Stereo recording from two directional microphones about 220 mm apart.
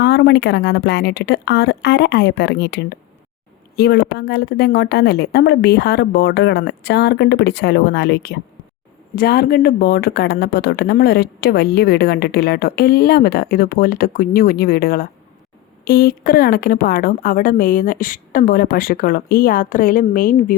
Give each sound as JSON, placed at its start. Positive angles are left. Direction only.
{"t": 0.0, "sound": "a woman's voice", "side_deg": 50}